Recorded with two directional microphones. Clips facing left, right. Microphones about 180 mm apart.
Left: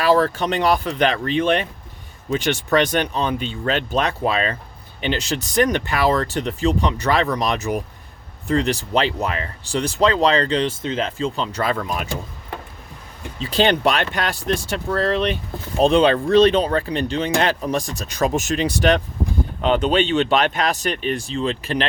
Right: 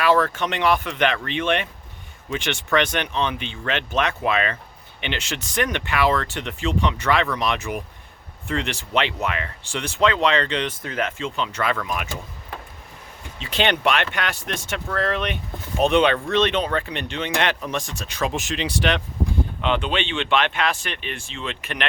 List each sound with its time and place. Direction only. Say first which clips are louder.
0.0 s speech: left 2 dB; 35° left (ahead or behind)
13.4 s speech: left 4 dB; 35° left (ahead or behind)